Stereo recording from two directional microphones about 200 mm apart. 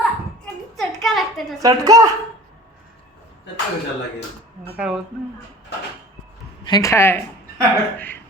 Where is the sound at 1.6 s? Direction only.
20° right (ahead or behind).